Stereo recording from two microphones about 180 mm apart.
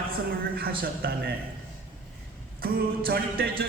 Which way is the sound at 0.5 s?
60° right (ahead or behind).